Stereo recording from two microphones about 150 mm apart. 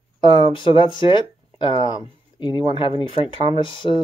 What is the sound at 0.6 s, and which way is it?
Speech, 30° left (ahead or behind).